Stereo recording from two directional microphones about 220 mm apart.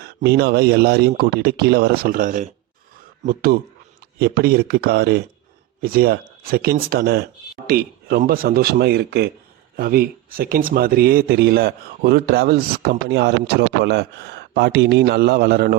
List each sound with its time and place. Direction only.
0.0 s speech: 45° right (ahead or behind)